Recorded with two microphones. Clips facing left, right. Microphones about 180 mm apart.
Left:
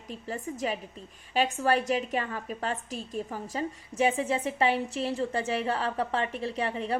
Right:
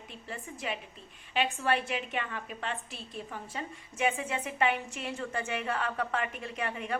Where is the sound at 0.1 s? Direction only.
40° left (ahead or behind).